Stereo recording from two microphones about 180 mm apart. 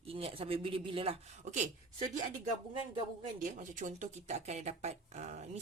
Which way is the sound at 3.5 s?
45° right (ahead or behind).